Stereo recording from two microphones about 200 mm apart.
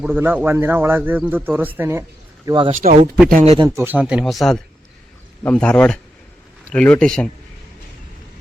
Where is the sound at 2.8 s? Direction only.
35° right (ahead or behind).